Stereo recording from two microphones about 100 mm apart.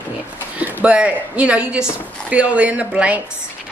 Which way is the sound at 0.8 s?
10° right (ahead or behind).